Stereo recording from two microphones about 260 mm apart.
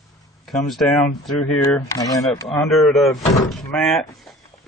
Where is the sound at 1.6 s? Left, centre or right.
Centre.